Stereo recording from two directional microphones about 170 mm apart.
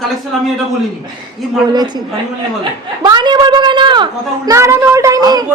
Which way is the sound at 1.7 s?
25° right (ahead or behind).